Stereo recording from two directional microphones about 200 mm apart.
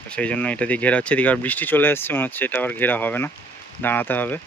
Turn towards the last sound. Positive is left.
turn(degrees=10)  # may be behind; listen again after turning